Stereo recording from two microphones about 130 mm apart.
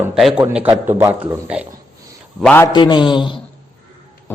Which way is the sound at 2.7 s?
35° left (ahead or behind).